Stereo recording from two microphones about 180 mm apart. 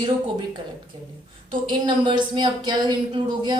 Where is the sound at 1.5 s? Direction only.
25° right (ahead or behind).